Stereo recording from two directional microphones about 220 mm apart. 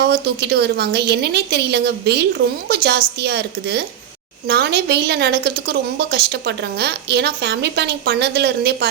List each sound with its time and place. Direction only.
0.0 s a woman's voice: 50° right (ahead or behind)